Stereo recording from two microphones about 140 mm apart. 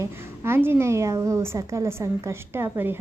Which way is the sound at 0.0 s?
15° right (ahead or behind).